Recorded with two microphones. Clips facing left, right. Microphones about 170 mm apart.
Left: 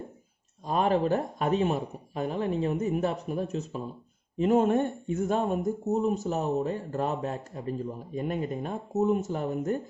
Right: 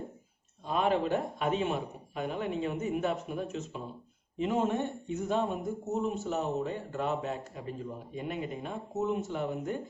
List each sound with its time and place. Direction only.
0.6 s speech: 40° left (ahead or behind)
4.4 s speech: 50° left (ahead or behind)